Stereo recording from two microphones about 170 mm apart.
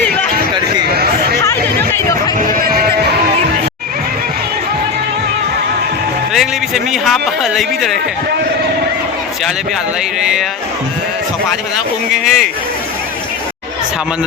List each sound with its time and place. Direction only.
2.5 s a sound: 55° right (ahead or behind)
6.3 s a man's voice: centre (ahead or behind)
12.1 s a man's voice: centre (ahead or behind)